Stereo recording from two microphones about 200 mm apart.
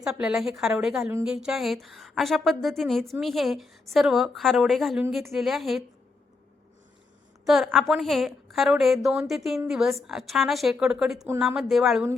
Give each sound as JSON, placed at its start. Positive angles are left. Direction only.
{"t": 0.0, "sound": "a woman's voice", "side_deg": -5}
{"t": 7.4, "sound": "a woman's voice", "side_deg": 0}